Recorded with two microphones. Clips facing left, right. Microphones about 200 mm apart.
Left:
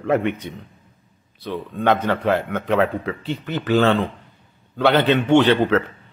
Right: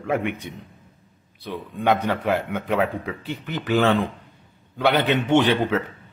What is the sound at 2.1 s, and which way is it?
A man's voice, 10° right (ahead or behind).